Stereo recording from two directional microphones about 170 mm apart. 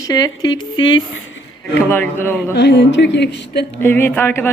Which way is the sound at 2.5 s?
80° left.